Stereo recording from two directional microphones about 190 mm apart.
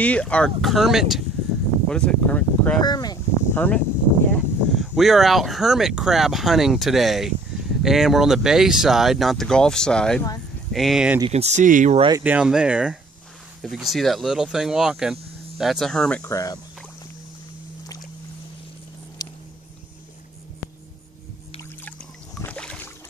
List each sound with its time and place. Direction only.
0.0 s speech: 5° left (ahead or behind)
2.8 s speech: 20° left (ahead or behind)
3.5 s speech: 10° left (ahead or behind)
11.1 s speech: 30° right (ahead or behind)
12.2 s speech: 5° right (ahead or behind)
16.3 s speech: 15° left (ahead or behind)
19.2 s a sound: 20° left (ahead or behind)
21.8 s music: 10° left (ahead or behind)